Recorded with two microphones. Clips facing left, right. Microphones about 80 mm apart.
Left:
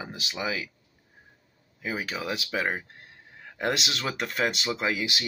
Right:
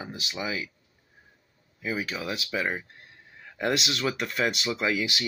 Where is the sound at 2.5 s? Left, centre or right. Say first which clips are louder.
Even; left.